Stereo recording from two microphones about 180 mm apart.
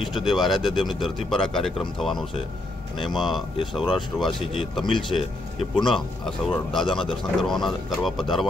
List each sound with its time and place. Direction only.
0.2 s speech: centre (ahead or behind)
6.9 s speech: 25° left (ahead or behind)
7.3 s speech: centre (ahead or behind)